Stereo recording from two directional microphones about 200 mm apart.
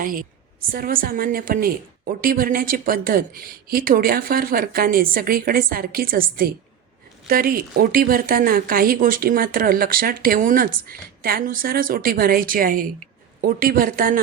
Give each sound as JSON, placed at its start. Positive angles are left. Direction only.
{"t": 0.0, "sound": "a woman's voice", "side_deg": -45}